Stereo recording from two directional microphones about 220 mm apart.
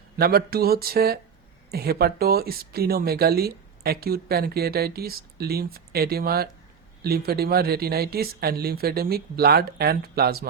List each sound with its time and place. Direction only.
0.2 s speech: 45° right (ahead or behind)